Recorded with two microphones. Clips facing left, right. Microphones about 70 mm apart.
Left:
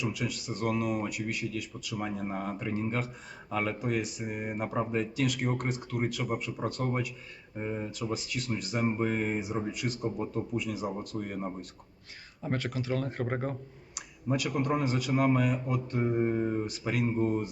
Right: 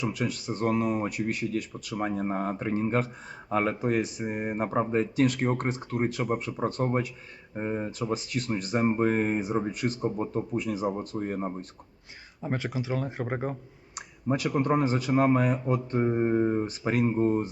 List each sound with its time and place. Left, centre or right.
0.0 s speech: right
12.4 s speech: centre
13.9 s speech: right